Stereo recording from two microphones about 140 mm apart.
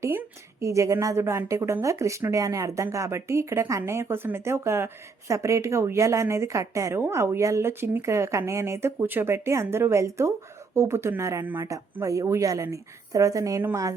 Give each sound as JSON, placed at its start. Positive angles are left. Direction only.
{"t": 0.0, "sound": "a woman's voice", "side_deg": -20}